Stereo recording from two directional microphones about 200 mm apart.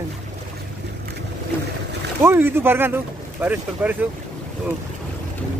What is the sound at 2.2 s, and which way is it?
Speech, 10° right (ahead or behind).